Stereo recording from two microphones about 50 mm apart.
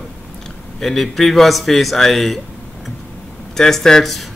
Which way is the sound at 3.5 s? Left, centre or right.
Centre.